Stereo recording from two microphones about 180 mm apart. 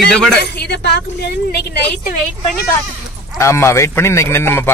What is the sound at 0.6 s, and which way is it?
A woman's voice, 65° left (ahead or behind).